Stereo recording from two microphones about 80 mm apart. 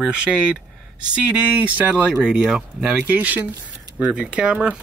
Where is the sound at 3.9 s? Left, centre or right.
Centre.